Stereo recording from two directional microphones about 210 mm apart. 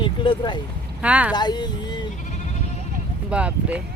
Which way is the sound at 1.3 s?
20° left (ahead or behind).